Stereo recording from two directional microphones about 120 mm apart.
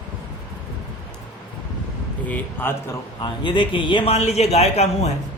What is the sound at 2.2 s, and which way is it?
Speech, 15° left (ahead or behind).